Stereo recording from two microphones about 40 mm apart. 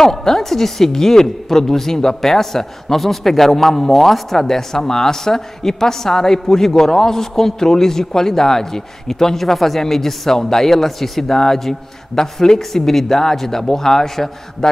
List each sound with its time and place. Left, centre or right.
0.0 s a woman's voice: centre